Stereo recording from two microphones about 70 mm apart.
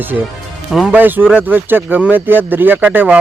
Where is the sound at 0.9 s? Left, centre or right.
Right.